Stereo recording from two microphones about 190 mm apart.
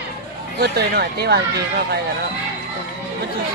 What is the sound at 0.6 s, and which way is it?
Speech, 60° right (ahead or behind).